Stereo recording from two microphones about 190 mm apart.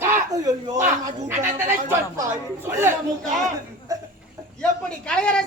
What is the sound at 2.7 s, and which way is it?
Speech, 10° right (ahead or behind).